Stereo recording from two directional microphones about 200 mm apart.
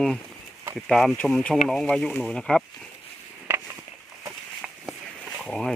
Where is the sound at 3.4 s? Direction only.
15° right (ahead or behind).